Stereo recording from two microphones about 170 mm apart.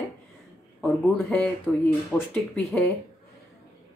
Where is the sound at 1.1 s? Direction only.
5° left (ahead or behind).